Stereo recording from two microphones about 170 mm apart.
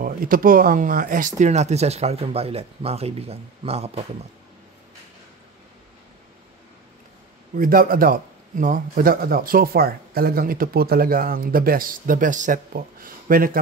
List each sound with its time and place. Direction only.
0.0 s speech: 55° right (ahead or behind); by 4.0 s 35° right (ahead or behind)
7.5 s a man's voice: 60° right (ahead or behind)